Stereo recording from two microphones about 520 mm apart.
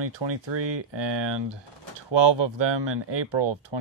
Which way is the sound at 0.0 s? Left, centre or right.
Right.